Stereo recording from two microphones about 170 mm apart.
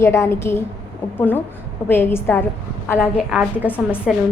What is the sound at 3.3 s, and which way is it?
Speech, 5° right (ahead or behind).